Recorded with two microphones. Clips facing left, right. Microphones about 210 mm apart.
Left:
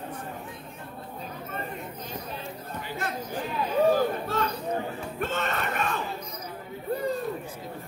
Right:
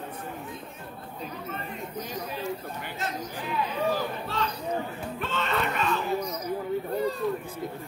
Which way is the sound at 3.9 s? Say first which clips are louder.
Left 5 dB; 50° left (ahead or behind).